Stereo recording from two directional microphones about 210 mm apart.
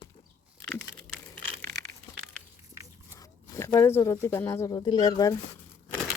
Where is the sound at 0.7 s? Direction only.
5° left (ahead or behind).